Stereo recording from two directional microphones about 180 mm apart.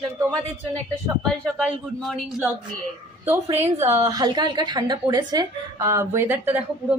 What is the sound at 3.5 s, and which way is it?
Speech, 35° right (ahead or behind).